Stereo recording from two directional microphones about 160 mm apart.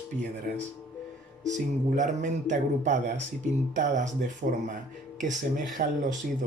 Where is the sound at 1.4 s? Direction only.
50° right (ahead or behind).